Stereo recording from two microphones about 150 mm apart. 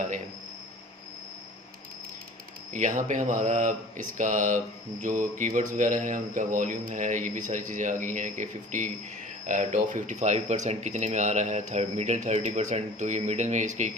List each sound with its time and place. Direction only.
2.7 s speech: 55° right (ahead or behind)